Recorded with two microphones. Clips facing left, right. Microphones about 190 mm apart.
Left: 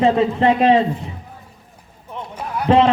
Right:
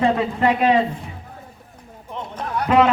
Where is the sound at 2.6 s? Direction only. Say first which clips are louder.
Left 2 dB; 30° left (ahead or behind).